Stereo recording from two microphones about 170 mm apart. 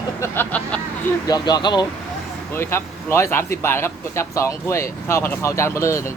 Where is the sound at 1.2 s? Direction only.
25° left (ahead or behind).